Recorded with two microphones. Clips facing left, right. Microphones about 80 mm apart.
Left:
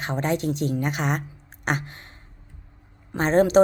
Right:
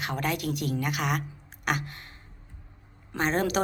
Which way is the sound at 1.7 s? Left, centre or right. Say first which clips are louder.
Left 3 dB; left.